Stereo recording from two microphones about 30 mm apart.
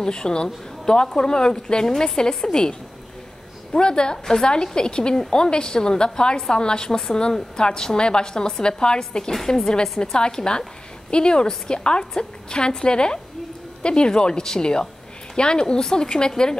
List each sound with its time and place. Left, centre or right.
0.0 s speech: left
3.7 s speech: left